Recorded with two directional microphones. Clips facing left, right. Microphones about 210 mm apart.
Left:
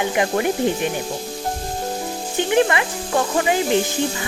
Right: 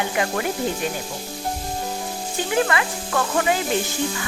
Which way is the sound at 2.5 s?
25° left (ahead or behind).